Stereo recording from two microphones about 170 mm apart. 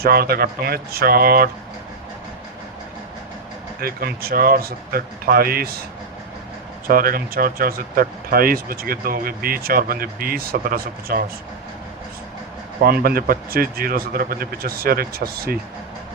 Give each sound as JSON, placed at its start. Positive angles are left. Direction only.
{"t": 0.0, "sound": "speech", "side_deg": -65}
{"t": 3.8, "sound": "speech", "side_deg": -60}
{"t": 6.8, "sound": "speech", "side_deg": -60}
{"t": 12.8, "sound": "speech", "side_deg": -60}